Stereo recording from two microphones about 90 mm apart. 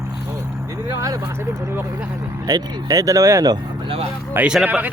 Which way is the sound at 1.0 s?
35° right (ahead or behind).